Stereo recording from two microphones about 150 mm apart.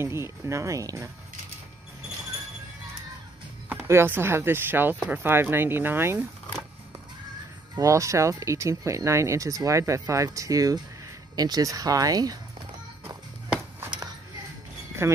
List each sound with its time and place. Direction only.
0.0 s speech: 15° right (ahead or behind)
3.6 s speech: 15° right (ahead or behind)
7.7 s speech: 20° right (ahead or behind)
15.0 s speech: 20° right (ahead or behind)